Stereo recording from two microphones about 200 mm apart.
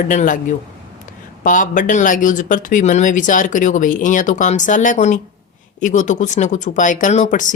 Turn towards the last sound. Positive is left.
turn(degrees=40)  # may be behind; listen again after turning